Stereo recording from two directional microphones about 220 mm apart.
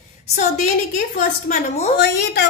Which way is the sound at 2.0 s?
50° left (ahead or behind).